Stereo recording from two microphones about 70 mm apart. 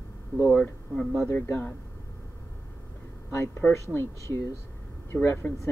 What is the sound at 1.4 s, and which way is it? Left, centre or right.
Speech, left.